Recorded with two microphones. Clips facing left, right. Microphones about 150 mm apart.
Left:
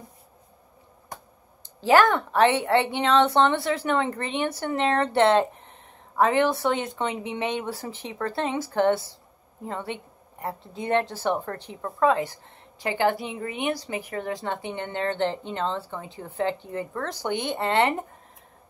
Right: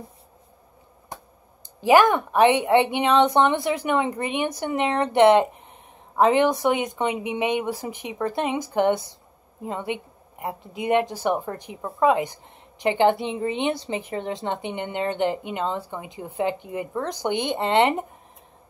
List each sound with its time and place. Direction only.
1.8 s a woman's voice: 15° right (ahead or behind)